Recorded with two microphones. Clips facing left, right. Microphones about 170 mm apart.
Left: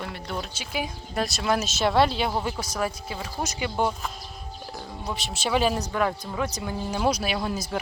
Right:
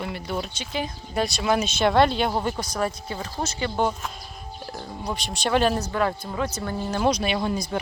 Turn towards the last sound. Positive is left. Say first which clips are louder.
# right 3 dB
turn(degrees=5)  # may be behind; listen again after turning